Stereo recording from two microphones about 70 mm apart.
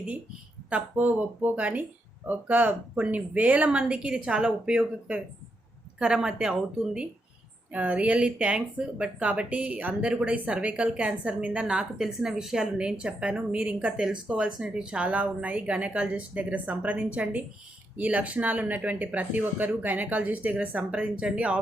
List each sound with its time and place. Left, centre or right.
0.7 s speech: centre